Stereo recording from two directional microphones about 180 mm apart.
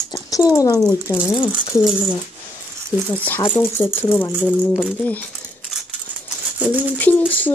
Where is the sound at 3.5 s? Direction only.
10° left (ahead or behind).